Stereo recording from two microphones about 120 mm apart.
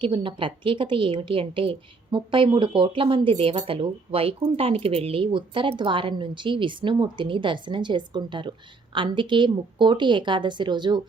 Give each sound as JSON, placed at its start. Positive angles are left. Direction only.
{"t": 0.0, "sound": "a woman's voice", "side_deg": -45}